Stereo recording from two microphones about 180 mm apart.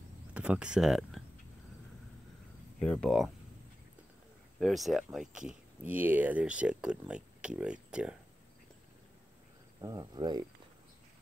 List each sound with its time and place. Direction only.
0.3 s speech: 5° right (ahead or behind)
2.8 s speech: 5° left (ahead or behind)
4.6 s speech: centre (ahead or behind)
9.8 s speech: 20° right (ahead or behind)